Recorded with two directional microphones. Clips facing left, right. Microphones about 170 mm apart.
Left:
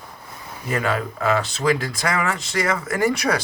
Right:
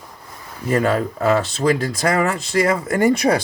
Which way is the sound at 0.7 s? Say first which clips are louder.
Right 5 dB; 40° right (ahead or behind).